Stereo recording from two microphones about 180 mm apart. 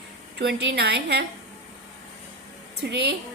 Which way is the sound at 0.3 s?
80° right.